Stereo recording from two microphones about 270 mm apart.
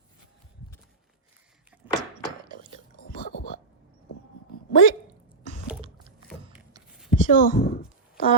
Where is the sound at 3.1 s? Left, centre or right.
Left.